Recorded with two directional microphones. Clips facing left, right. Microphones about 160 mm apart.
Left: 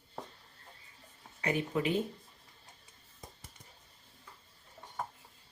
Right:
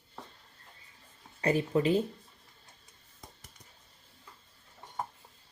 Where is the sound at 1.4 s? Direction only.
35° right (ahead or behind).